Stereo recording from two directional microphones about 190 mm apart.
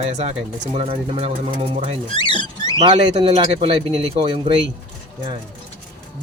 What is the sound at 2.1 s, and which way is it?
Speech, 25° left (ahead or behind).